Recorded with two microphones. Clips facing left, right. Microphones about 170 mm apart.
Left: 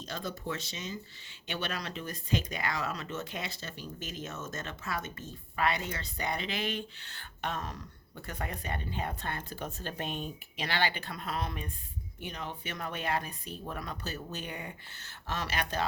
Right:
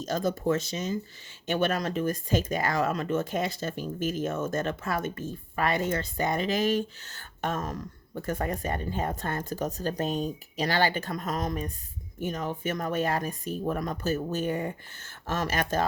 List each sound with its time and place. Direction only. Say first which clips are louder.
0.0 s speech: right 10 dB; 45° right (ahead or behind)